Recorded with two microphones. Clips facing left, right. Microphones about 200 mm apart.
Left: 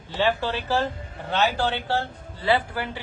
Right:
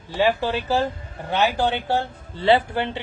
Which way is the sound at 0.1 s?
15° right (ahead or behind).